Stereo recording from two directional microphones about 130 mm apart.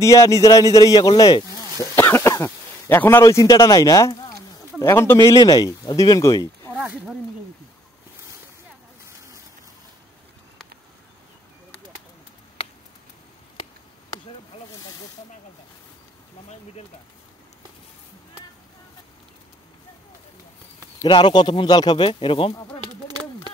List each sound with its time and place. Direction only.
0.0 s speech: 25° left (ahead or behind)
2.0 s speech: 15° left (ahead or behind)
6.7 s speech: 10° right (ahead or behind)
21.1 s speech: 35° left (ahead or behind)
23.0 s a sound: 30° right (ahead or behind)